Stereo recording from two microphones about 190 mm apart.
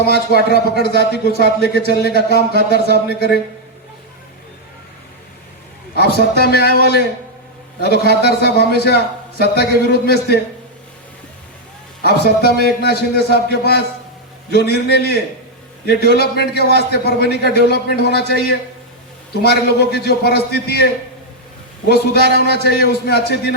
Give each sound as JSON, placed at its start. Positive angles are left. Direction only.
{"t": 0.0, "sound": "a man's voice", "side_deg": 55}
{"t": 6.0, "sound": "a man's voice", "side_deg": 55}
{"t": 12.0, "sound": "a man's voice", "side_deg": 55}
{"t": 22.3, "sound": "a man's voice", "side_deg": 60}